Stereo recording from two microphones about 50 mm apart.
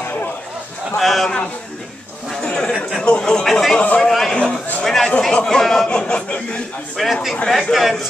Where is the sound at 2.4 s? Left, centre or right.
Centre.